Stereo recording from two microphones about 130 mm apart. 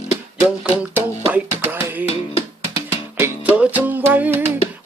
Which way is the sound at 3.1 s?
15° right (ahead or behind).